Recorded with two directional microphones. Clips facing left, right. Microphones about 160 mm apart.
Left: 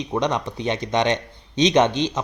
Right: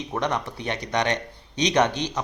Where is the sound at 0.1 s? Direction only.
20° left (ahead or behind).